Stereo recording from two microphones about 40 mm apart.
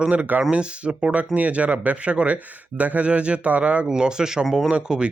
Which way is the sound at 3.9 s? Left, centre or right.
Centre.